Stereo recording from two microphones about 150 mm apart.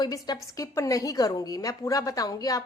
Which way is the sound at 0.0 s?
30° left (ahead or behind).